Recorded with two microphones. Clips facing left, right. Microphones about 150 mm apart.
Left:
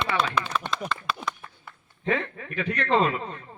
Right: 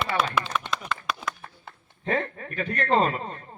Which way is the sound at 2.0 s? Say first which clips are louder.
Even; 40° right (ahead or behind).